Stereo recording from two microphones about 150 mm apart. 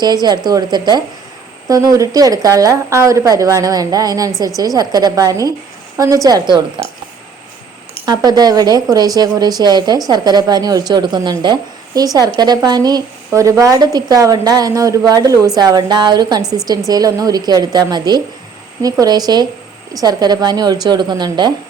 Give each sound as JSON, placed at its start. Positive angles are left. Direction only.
{"t": 0.0, "sound": "a woman's voice", "side_deg": -25}
{"t": 8.0, "sound": "a woman's voice", "side_deg": -25}